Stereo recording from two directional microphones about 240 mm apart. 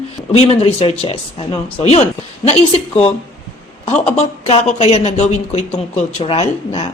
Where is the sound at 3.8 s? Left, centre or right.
Left.